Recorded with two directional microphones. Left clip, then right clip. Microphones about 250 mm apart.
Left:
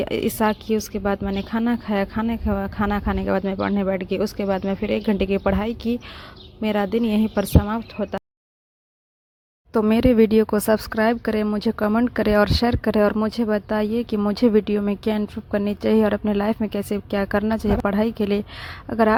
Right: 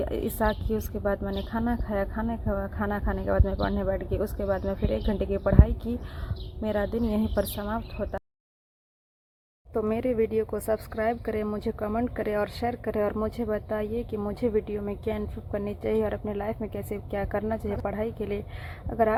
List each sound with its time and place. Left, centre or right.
0.0 s speech: left
9.7 s speech: left